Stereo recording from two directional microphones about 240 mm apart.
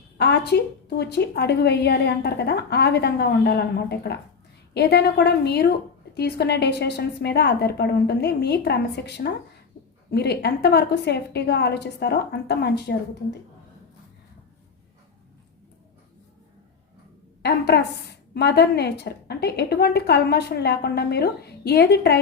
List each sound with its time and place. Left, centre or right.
0.2 s a woman's voice: left
17.4 s a woman's voice: left